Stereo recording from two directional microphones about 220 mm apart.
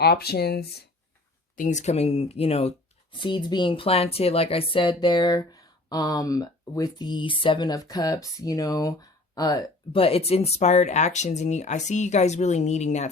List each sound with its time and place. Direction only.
0.0 s speech: 45° left (ahead or behind)
1.5 s speech: 35° left (ahead or behind)